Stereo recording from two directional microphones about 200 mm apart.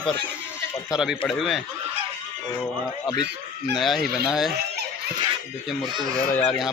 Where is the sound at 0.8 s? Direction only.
Centre (ahead or behind).